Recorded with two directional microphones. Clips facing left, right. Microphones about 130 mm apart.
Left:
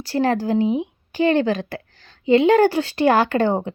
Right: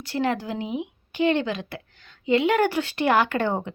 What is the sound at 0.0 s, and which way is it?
A woman's voice, 35° left (ahead or behind).